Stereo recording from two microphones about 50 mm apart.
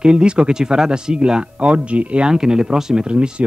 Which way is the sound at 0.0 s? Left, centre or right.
Centre.